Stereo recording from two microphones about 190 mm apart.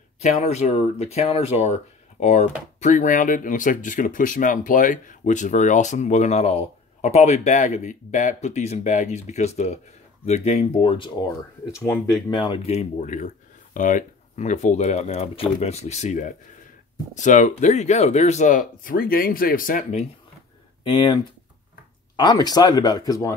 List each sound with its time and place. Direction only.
0.2 s speech: 35° left (ahead or behind)
11.7 s speech: 15° left (ahead or behind); by 20.1 s 40° left (ahead or behind)
20.8 s speech: 25° left (ahead or behind)